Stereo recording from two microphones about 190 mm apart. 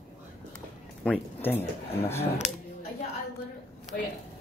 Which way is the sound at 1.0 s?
10° left (ahead or behind).